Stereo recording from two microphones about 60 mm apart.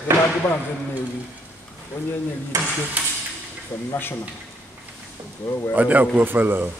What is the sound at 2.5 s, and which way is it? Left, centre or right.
Speech, right.